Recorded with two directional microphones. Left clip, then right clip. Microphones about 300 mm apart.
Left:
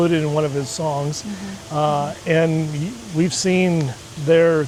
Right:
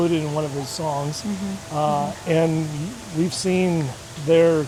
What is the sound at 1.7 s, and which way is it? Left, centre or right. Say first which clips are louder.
Speech: left 2 dB; left.